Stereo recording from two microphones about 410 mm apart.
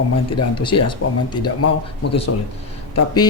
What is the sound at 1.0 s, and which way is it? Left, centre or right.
Speech, left.